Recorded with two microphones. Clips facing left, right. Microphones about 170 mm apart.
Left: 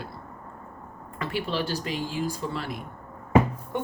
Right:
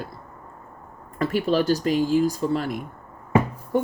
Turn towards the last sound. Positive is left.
turn(degrees=-35)  # may be behind; listen again after turning